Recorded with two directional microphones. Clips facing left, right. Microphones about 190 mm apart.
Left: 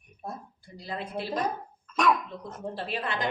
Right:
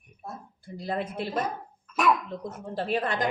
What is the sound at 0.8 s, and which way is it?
Speech, 50° right (ahead or behind).